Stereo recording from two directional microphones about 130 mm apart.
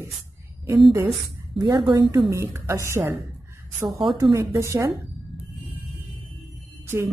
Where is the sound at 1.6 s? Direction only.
35° right (ahead or behind).